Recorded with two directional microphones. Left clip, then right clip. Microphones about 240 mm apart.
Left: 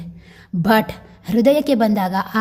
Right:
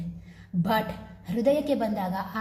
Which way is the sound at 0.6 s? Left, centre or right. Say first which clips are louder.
Left 10 dB; left.